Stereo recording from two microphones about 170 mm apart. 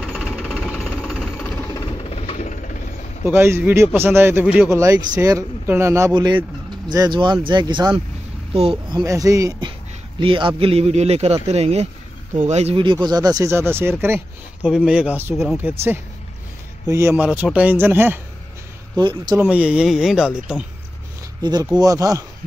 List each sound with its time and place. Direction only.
0.0 s jackhammer: 5° right (ahead or behind)
1.4 s jackhammer: 15° left (ahead or behind)
2.0 s vehicle: 35° left (ahead or behind)
3.3 s speech: 15° right (ahead or behind)
4.7 s speech: 20° right (ahead or behind)
16.8 s speech: 15° right (ahead or behind)
18.9 s speech: 25° right (ahead or behind)
19.5 s speech: 5° right (ahead or behind)
21.4 s speech: 25° right (ahead or behind)